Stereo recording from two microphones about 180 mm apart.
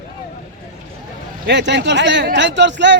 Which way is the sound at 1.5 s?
75° right (ahead or behind).